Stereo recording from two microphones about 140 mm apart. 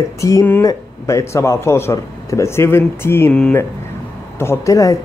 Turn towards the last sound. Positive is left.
turn(degrees=25)  # may be behind; listen again after turning